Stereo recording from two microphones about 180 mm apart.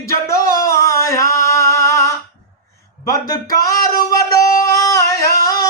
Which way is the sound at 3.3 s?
20° left (ahead or behind).